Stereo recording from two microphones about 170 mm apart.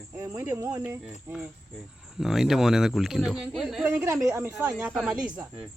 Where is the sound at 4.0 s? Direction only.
20° right (ahead or behind).